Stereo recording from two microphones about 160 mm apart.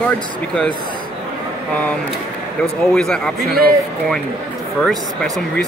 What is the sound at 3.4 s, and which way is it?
Speech, 70° right (ahead or behind).